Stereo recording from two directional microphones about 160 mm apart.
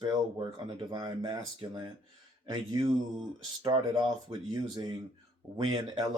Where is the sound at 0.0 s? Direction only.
25° right (ahead or behind).